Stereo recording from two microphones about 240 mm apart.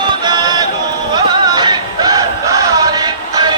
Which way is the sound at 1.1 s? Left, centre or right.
Centre.